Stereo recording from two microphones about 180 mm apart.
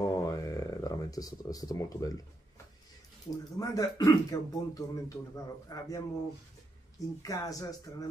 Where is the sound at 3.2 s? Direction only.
20° left (ahead or behind).